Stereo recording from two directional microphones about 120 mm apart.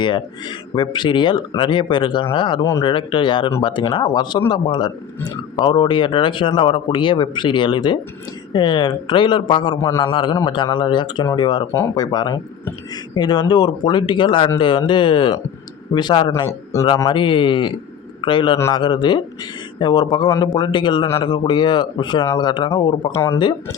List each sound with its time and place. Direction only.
0.0 s speech: 40° left (ahead or behind)
16.7 s speech: 25° left (ahead or behind)
17.1 s a man's voice: 40° left (ahead or behind)
23.1 s speech: 25° left (ahead or behind)
23.4 s speech: 40° left (ahead or behind)